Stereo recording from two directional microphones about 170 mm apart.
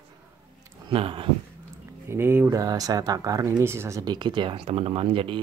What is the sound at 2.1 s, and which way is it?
Speech, 15° right (ahead or behind).